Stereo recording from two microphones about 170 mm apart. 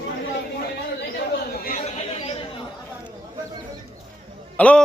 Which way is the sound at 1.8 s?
35° left (ahead or behind).